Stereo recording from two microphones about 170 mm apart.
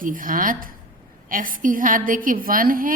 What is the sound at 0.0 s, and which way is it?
A woman's voice, 55° right (ahead or behind).